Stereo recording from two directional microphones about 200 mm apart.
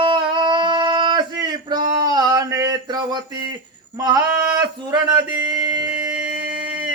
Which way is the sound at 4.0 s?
15° right (ahead or behind).